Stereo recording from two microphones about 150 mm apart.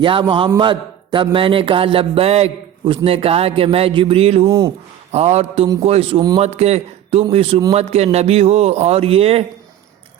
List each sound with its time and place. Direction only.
0.0 s a man's voice: 35° right (ahead or behind)